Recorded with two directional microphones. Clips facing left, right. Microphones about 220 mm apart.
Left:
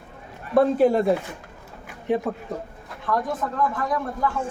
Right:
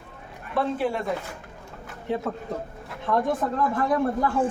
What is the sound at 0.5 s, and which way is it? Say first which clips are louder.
Speech: left 8 dB; 40° left (ahead or behind).